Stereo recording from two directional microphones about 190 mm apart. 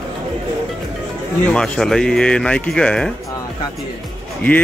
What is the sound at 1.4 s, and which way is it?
Speech, 5° left (ahead or behind).